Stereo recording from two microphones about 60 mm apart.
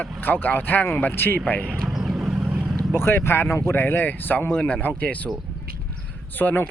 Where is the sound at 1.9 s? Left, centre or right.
Centre; by 2.6 s right.